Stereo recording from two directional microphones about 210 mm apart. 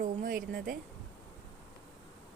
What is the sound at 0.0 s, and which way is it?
Speech, 40° right (ahead or behind).